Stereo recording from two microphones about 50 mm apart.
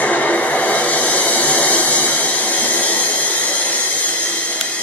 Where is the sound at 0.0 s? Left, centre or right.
Left.